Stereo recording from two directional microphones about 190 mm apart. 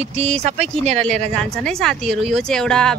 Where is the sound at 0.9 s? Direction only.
5° left (ahead or behind).